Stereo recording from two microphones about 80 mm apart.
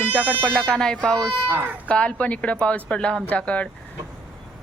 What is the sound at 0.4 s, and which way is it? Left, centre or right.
Speech, centre.